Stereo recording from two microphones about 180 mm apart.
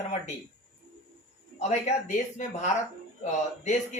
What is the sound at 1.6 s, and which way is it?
Speech, 40° left (ahead or behind).